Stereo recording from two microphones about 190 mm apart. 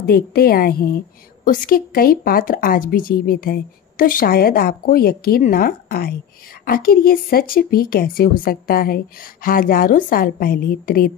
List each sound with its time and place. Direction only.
0.0 s a woman's voice: 55° left (ahead or behind)